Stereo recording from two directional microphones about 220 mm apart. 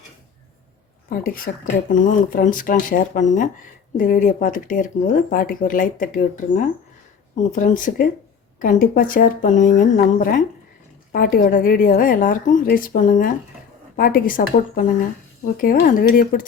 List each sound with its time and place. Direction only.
1.1 s speech: 40° left (ahead or behind)